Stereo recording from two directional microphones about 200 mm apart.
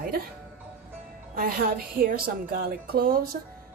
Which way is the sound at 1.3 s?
45° right (ahead or behind).